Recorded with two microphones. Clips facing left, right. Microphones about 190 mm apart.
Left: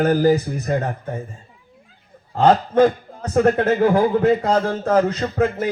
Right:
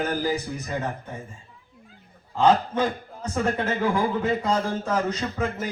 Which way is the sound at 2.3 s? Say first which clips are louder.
Left 5 dB; 55° left (ahead or behind).